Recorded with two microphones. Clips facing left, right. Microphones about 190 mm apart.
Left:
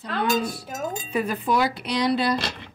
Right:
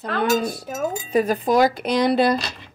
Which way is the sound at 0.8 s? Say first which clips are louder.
Right 6 dB; 40° right (ahead or behind).